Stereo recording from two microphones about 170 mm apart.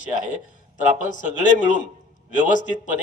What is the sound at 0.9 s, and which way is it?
Speech, 50° left (ahead or behind).